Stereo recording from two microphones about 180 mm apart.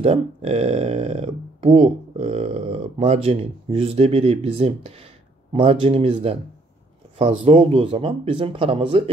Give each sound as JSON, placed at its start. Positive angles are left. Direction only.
{"t": 0.0, "sound": "speech", "side_deg": -35}